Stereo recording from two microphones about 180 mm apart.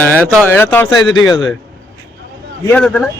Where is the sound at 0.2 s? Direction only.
10° left (ahead or behind).